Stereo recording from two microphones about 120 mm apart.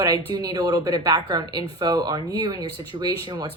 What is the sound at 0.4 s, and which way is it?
Speech, 30° right (ahead or behind).